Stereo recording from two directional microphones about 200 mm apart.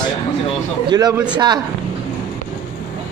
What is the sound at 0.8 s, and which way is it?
Speech, 20° right (ahead or behind).